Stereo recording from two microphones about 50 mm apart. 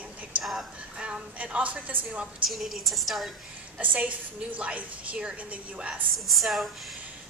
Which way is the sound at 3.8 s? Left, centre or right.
Right.